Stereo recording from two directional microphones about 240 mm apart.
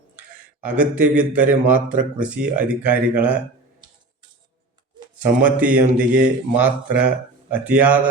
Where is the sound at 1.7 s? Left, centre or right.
Right.